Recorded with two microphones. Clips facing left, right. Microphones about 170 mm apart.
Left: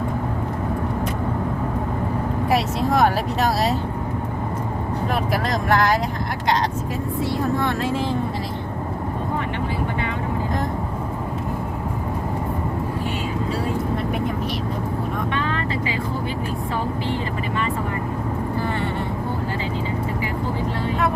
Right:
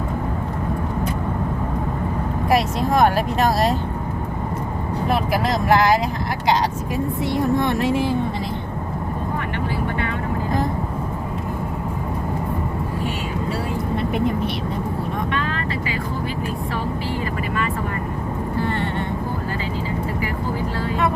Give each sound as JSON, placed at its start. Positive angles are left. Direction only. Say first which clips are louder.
{"t": 2.5, "sound": "speech", "louder": "right 2 dB", "side_deg": 0}
{"t": 5.3, "sound": "speech", "louder": "right 3 dB", "side_deg": -10}
{"t": 7.2, "sound": "speech", "louder": "right 2 dB", "side_deg": -20}